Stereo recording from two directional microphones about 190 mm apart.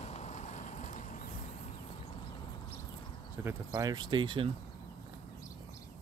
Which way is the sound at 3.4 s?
15° right (ahead or behind).